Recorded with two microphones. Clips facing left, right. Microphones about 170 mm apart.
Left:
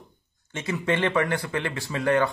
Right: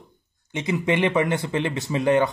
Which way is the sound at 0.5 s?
15° right (ahead or behind).